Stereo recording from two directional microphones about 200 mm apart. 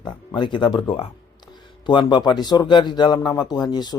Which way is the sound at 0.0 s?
20° left (ahead or behind).